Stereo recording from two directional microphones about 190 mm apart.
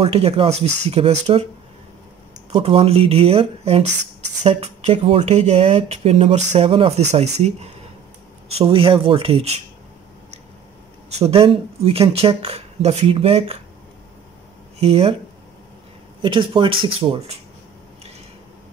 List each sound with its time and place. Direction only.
0.0 s speech: 30° right (ahead or behind)
2.5 s speech: 30° right (ahead or behind)
11.1 s speech: 35° right (ahead or behind)
14.8 s speech: 30° right (ahead or behind)
16.2 s speech: 25° right (ahead or behind)